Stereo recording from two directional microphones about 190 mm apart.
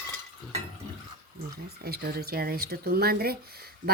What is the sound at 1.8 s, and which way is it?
Speech, 55° right (ahead or behind).